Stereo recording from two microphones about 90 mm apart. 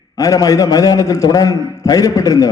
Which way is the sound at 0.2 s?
40° left (ahead or behind).